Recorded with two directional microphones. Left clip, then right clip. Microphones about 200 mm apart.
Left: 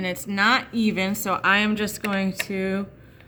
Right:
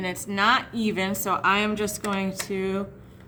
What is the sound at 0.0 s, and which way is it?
Speech, 25° left (ahead or behind).